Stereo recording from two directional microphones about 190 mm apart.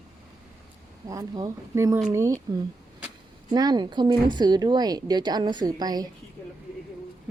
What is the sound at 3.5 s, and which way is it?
A woman's voice, 20° right (ahead or behind).